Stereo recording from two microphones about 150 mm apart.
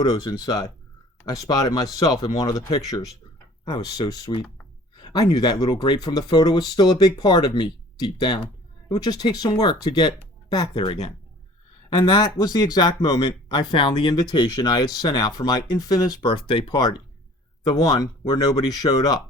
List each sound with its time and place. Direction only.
0.0 s speech: 25° left (ahead or behind)